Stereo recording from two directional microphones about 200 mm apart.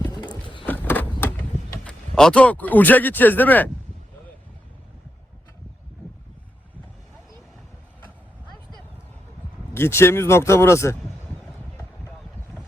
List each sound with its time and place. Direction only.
0.0 s a sound: 20° left (ahead or behind)
1.8 s speech: 5° left (ahead or behind)
9.7 s speech: 10° left (ahead or behind)